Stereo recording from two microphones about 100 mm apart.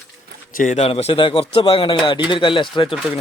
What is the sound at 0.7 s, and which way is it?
Speech, 85° left.